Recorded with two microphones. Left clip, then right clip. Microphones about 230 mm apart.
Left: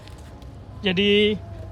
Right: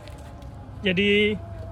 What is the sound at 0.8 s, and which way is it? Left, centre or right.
Speech, left.